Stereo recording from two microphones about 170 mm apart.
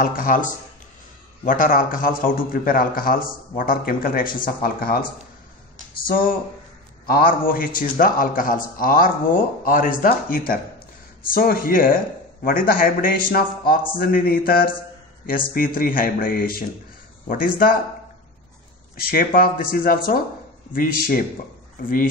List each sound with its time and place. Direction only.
0.0 s a man's voice: 55° left (ahead or behind)
6.0 s a man's voice: 55° left (ahead or behind)
18.9 s a man's voice: 60° left (ahead or behind)